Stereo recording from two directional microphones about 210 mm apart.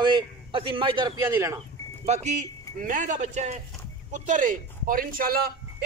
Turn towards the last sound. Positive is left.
turn(degrees=-45)  # may be behind; listen again after turning